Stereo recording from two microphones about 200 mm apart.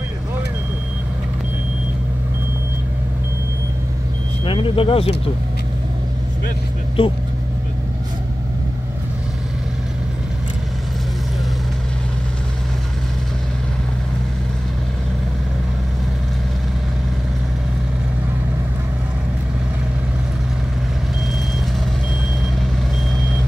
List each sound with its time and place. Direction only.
4.5 s speech: 25° left (ahead or behind)
7.0 s speech: 25° left (ahead or behind)